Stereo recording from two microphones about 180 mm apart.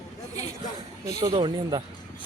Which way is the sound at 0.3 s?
40° left (ahead or behind).